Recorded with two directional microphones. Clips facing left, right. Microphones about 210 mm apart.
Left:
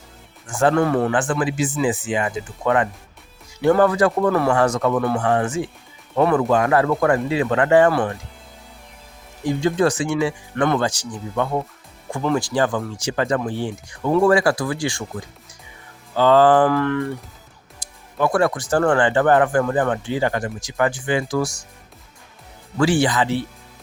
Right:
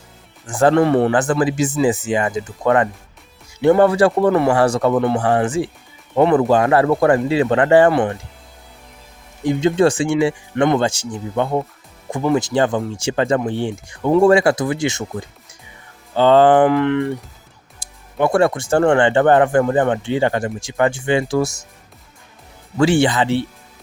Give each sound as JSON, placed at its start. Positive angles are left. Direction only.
{"t": 0.4, "sound": "speech", "side_deg": -35}
{"t": 3.6, "sound": "speech", "side_deg": -25}
{"t": 4.5, "sound": "speech", "side_deg": -30}
{"t": 9.5, "sound": "speech", "side_deg": -20}
{"t": 16.1, "sound": "speech", "side_deg": -25}
{"t": 22.8, "sound": "speech", "side_deg": -25}